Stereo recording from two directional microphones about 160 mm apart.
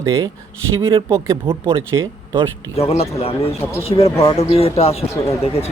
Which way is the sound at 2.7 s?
40° left (ahead or behind).